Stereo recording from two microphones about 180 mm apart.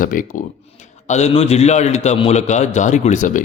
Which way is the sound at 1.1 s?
35° left (ahead or behind).